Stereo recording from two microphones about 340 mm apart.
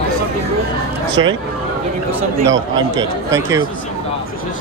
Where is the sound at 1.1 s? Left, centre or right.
Right.